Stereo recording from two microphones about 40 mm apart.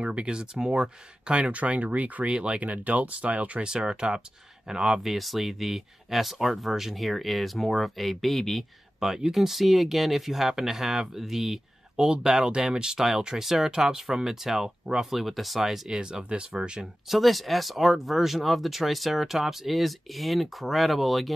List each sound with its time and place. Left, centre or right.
0.0 s speech: right
1.5 s speech: right
2.2 s speech: right
3.6 s speech: right
5.0 s speech: centre
9.0 s speech: centre
15.9 s speech: right
17.1 s speech: centre